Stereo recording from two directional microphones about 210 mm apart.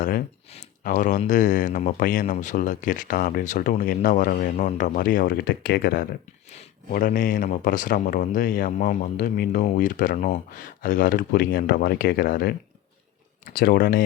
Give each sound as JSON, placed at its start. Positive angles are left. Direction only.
{"t": 0.0, "sound": "speech", "side_deg": 40}